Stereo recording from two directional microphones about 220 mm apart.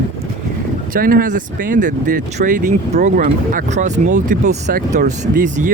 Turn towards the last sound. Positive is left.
turn(degrees=-40)  # may be behind; listen again after turning